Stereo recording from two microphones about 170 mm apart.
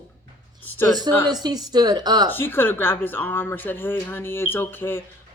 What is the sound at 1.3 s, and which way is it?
Speech, 25° right (ahead or behind).